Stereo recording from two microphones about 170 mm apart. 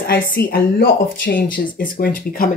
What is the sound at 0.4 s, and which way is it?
Speech, 65° left (ahead or behind).